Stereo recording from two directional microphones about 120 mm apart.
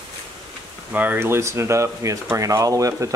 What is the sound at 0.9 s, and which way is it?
Speech, 15° right (ahead or behind).